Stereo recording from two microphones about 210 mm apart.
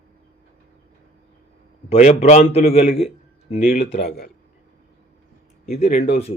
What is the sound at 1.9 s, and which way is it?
A man's voice, 30° left (ahead or behind).